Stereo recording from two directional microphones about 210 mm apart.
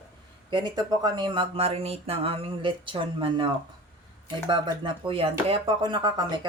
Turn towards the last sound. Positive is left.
turn(degrees=-20)  # may be behind; listen again after turning